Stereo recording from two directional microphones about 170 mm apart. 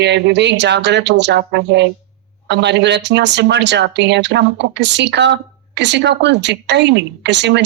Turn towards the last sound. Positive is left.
turn(degrees=-90)